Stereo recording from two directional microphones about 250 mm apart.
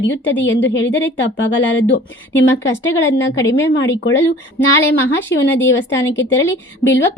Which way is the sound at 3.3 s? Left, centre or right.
Centre.